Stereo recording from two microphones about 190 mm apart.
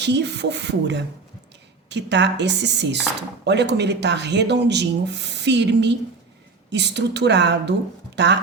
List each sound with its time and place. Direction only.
0.0 s speech: 65° right (ahead or behind)